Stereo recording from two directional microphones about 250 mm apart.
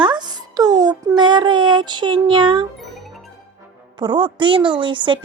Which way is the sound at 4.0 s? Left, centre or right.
Centre.